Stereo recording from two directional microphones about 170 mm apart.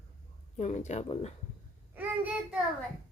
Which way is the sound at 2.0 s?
10° right (ahead or behind).